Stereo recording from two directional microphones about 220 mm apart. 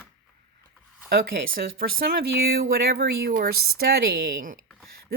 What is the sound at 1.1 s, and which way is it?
A woman's voice, 45° right (ahead or behind).